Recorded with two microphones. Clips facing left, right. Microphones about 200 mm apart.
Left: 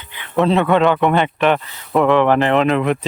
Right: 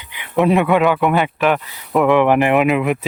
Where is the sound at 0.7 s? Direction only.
Centre (ahead or behind).